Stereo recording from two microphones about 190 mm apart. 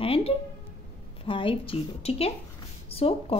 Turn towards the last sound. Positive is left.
turn(degrees=30)  # may be behind; listen again after turning